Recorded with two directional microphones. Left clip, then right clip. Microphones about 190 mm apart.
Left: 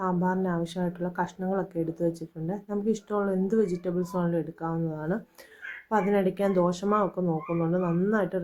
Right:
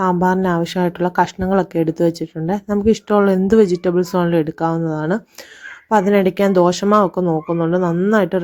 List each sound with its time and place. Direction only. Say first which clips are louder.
0.0 s speech: right 12 dB; 45° right (ahead or behind)